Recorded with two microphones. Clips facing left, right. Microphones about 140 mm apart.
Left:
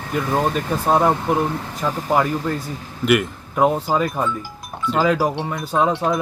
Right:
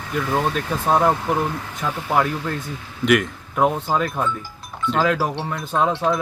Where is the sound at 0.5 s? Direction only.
5° left (ahead or behind).